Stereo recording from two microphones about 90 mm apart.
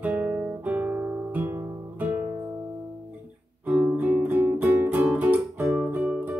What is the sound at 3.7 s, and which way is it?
Music, 20° right (ahead or behind).